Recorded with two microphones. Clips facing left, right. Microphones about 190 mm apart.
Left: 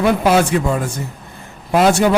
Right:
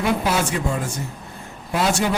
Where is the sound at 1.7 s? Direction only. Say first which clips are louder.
Left 8 dB; 65° left (ahead or behind).